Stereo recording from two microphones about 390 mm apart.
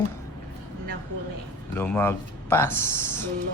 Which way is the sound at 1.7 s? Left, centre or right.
Centre.